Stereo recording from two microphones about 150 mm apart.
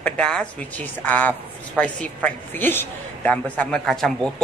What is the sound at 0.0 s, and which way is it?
A woman's voice, 5° left (ahead or behind).